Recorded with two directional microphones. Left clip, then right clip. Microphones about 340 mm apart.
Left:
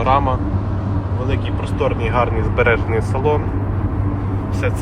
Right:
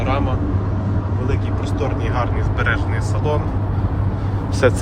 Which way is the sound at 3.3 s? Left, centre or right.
Centre.